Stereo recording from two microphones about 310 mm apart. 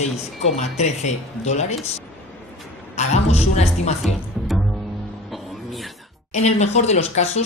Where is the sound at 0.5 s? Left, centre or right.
Left.